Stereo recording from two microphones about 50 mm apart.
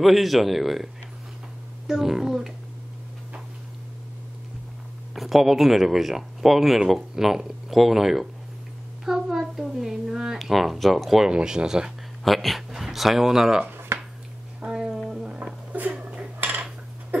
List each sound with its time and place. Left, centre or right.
0.0 s speech: centre
1.9 s speech: centre
5.1 s a child's voice: centre
11.2 s speech: centre
12.3 s speech: centre
13.7 s a sound: right
14.6 s music: centre
15.7 s a sound: right